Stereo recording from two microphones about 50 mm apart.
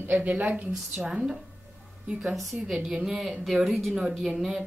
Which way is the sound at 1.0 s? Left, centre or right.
Centre.